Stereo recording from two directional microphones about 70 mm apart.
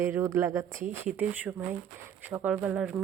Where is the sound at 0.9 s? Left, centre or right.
Right; by 3.0 s centre.